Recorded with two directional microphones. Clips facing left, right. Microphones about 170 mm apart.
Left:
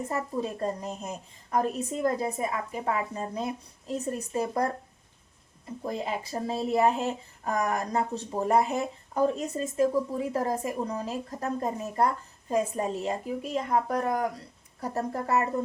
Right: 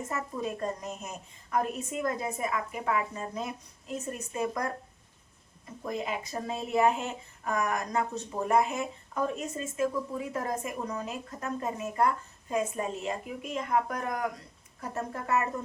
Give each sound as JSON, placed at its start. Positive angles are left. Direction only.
{"t": 0.1, "sound": "speech", "side_deg": 30}
{"t": 5.8, "sound": "speech", "side_deg": 30}